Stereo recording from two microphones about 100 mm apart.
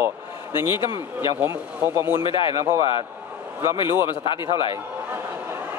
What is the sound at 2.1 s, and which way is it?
Speech, 60° left (ahead or behind).